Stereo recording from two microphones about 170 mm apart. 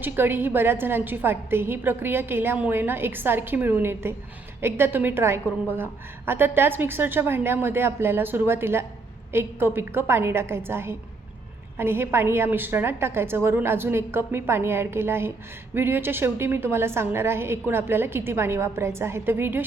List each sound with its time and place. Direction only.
0.0 s a woman's voice: 10° right (ahead or behind)